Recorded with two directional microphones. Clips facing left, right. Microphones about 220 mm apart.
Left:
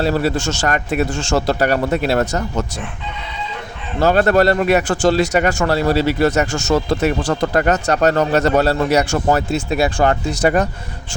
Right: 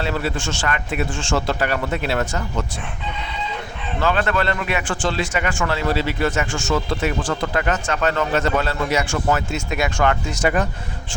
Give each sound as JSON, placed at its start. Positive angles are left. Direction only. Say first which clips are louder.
{"t": 0.0, "sound": "a man's voice", "louder": "left 6 dB", "side_deg": 40}
{"t": 4.0, "sound": "a man's voice", "louder": "left 8 dB", "side_deg": 40}